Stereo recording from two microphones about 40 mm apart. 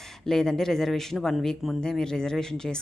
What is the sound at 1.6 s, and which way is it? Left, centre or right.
Speech, centre.